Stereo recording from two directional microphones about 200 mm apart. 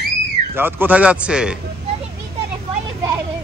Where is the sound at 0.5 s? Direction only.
10° right (ahead or behind).